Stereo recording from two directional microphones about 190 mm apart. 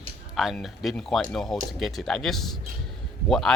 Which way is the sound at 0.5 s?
Centre (ahead or behind).